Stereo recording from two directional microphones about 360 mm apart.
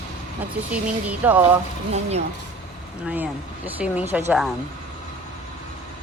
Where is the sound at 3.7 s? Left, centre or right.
Centre.